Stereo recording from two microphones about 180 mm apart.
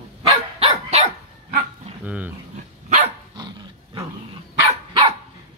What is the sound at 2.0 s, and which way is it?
Speech, 5° right (ahead or behind).